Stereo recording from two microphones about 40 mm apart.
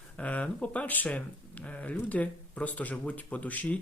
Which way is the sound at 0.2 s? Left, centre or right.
Left.